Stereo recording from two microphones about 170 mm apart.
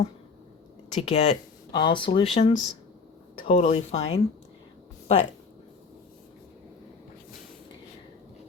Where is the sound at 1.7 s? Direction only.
30° left (ahead or behind).